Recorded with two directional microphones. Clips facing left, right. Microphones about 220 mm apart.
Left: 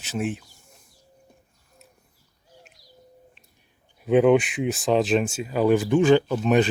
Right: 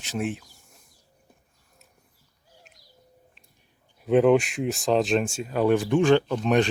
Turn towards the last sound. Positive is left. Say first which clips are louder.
# left 2 dB
turn(degrees=5)  # may be behind; listen again after turning